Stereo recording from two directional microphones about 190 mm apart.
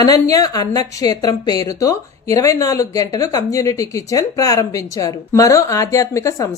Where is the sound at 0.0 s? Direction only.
20° left (ahead or behind).